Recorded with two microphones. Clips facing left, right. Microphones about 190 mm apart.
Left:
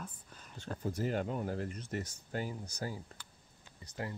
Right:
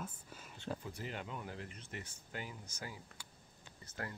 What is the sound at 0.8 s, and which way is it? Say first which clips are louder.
Speech: left 10 dB; 45° left (ahead or behind).